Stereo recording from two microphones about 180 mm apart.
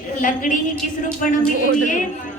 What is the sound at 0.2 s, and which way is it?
Speech, 45° left (ahead or behind).